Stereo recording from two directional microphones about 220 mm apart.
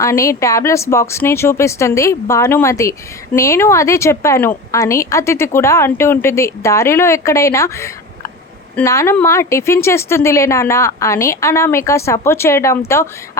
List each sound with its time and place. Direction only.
0.0 s speech: 15° left (ahead or behind)